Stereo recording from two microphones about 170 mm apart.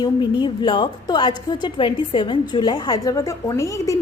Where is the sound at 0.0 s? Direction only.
25° left (ahead or behind).